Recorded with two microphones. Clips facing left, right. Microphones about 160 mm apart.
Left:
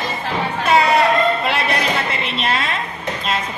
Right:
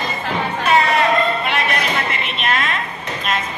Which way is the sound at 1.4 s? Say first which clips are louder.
Left 1 dB; 30° left (ahead or behind).